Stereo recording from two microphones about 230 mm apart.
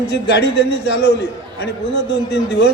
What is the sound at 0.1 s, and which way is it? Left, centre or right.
A man's voice, left.